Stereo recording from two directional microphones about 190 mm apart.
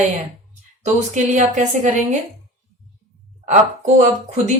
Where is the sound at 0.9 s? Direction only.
40° right (ahead or behind).